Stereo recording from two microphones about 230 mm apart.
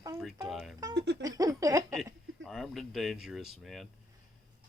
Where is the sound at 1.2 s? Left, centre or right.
Centre.